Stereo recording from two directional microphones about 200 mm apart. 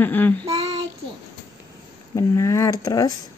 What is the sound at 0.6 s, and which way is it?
Child singing, 20° right (ahead or behind).